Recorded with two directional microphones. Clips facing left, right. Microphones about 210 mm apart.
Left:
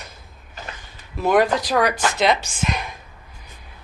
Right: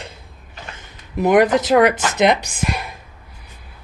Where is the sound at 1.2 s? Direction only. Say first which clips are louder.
Right 4 dB; 20° right (ahead or behind).